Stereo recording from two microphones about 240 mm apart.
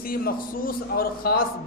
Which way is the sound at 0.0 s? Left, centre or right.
Left.